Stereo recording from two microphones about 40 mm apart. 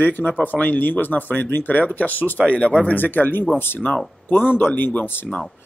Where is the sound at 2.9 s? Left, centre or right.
Left.